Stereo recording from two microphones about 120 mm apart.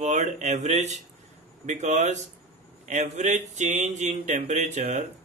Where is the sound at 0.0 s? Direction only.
75° right (ahead or behind).